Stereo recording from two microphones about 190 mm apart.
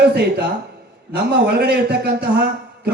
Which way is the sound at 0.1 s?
60° right (ahead or behind).